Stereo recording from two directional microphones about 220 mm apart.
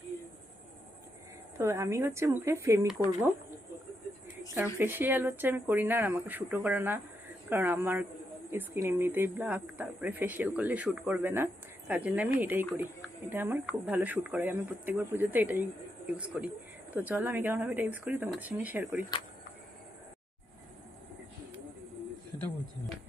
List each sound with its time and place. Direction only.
1.5 s speech: 10° right (ahead or behind)
4.5 s speech: 10° right (ahead or behind)